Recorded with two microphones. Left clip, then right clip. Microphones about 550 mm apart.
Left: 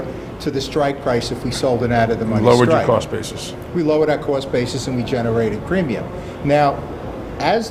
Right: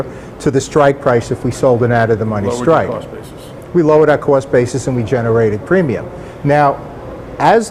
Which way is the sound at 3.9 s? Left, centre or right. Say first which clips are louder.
Right 7 dB; right.